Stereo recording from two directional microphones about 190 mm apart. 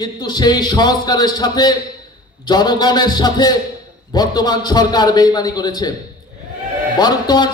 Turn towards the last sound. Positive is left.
turn(degrees=20)  # may be behind; listen again after turning